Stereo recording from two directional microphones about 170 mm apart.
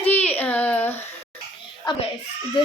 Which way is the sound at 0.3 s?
10° left (ahead or behind).